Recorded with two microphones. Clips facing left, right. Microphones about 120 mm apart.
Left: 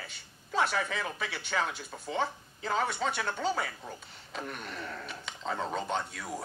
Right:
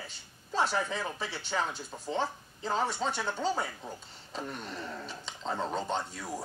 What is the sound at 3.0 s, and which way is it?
Speech, 5° right (ahead or behind).